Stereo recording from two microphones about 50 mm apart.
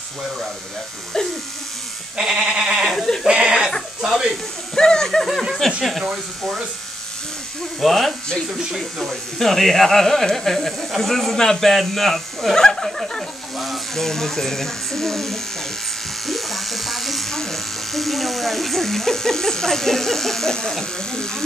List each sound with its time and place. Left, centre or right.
1.1 s speech: centre
2.1 s sheep: centre
3.3 s chuckle: right
4.0 s speech: centre
4.7 s speech: centre
7.8 s speech: centre